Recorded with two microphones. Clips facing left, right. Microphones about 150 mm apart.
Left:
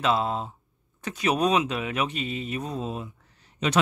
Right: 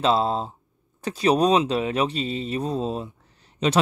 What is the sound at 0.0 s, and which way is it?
Speech, 30° right (ahead or behind).